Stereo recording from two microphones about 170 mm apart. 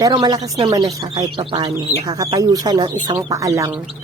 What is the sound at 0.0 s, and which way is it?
Speech, 20° right (ahead or behind).